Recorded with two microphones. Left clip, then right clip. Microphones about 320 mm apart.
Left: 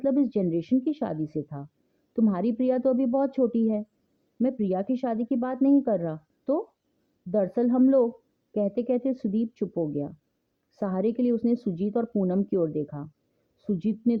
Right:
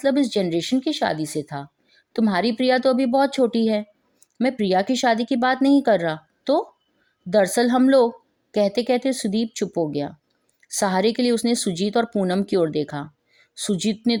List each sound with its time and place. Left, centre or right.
0.0 s a woman's voice: centre
10.7 s a woman's voice: right